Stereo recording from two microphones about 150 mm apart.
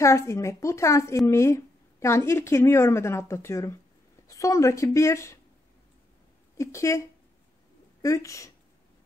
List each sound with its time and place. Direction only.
0.0 s a woman's voice: 20° left (ahead or behind)
6.6 s a woman's voice: 20° left (ahead or behind)
8.0 s speech: 20° left (ahead or behind)